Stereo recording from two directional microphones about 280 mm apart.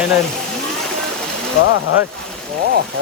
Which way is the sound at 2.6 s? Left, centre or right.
Right.